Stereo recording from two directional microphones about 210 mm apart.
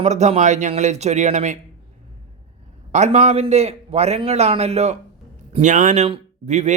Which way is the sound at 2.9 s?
35° right (ahead or behind).